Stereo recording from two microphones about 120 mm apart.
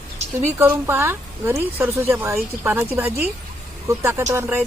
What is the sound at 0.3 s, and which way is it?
A woman's voice, 20° right (ahead or behind).